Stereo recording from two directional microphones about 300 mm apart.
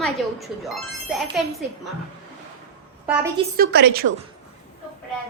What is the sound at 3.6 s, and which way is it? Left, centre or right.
Speech, right.